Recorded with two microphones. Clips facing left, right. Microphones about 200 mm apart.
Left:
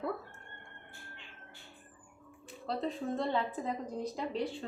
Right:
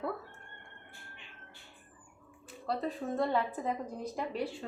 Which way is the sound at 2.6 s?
Centre (ahead or behind).